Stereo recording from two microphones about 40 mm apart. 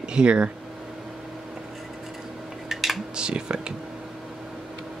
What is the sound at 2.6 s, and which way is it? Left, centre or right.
Cutlery, centre.